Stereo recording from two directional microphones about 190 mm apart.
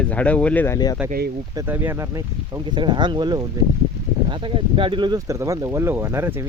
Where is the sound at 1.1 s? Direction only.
55° right (ahead or behind).